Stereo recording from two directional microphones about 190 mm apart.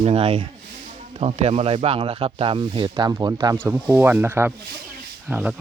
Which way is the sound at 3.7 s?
5° right (ahead or behind).